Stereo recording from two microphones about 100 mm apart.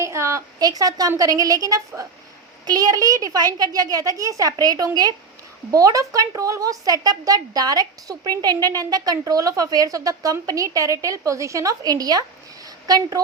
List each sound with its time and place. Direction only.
0.0 s a woman's voice: 30° right (ahead or behind)